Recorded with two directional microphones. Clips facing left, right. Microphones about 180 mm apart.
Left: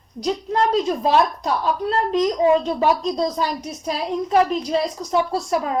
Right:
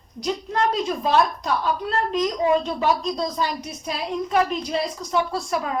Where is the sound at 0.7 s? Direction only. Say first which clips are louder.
Left 3 dB; 35° left (ahead or behind).